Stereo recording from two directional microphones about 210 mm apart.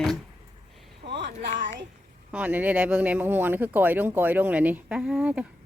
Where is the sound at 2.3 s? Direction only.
5° right (ahead or behind).